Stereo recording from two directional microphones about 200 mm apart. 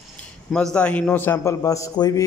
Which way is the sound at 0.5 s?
5° left (ahead or behind).